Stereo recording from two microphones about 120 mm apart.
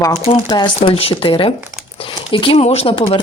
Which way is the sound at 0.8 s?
55° left (ahead or behind).